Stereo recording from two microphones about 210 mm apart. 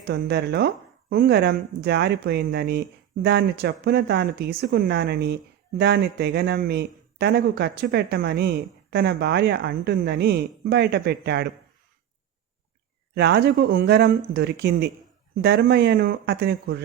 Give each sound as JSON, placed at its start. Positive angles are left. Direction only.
{"t": 0.0, "sound": "speech", "side_deg": -50}
{"t": 13.1, "sound": "speech", "side_deg": -50}